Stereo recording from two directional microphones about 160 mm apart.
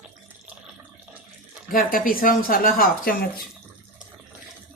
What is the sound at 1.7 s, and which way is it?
Speech, 60° left (ahead or behind).